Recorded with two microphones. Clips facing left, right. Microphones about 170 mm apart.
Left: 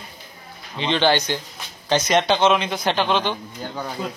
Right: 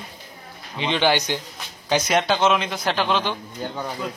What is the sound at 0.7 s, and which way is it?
A man's voice, 10° right (ahead or behind).